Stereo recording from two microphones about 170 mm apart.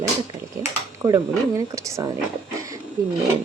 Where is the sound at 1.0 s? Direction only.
20° right (ahead or behind).